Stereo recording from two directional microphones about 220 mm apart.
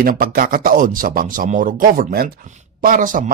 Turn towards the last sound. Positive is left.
turn(degrees=-40)  # may be behind; listen again after turning